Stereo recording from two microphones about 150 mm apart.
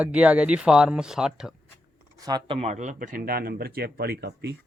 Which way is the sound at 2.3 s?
25° right (ahead or behind).